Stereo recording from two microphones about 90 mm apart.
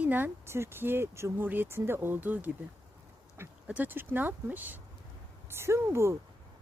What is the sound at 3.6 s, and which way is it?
A woman's voice, 15° right (ahead or behind).